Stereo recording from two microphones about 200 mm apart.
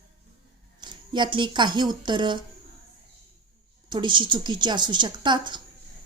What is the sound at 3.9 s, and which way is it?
A woman's voice, 25° right (ahead or behind).